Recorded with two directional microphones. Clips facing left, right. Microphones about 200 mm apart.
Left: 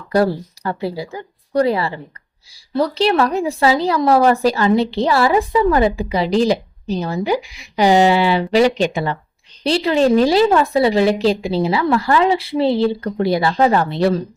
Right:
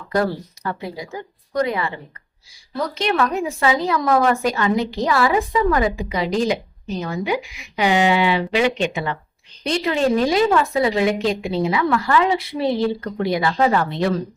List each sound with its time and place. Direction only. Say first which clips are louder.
0.1 s a woman's voice: left 5 dB; 30° left (ahead or behind)